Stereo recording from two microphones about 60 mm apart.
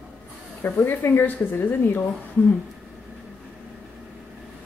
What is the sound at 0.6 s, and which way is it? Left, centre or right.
Speech, left.